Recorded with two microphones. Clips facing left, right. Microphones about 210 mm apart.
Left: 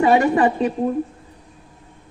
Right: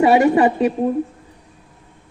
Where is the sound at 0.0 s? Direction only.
20° right (ahead or behind).